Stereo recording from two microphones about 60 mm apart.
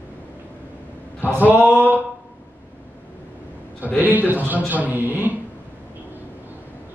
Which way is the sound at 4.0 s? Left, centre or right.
Right.